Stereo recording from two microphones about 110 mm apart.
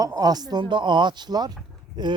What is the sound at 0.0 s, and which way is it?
Speech, 35° right (ahead or behind).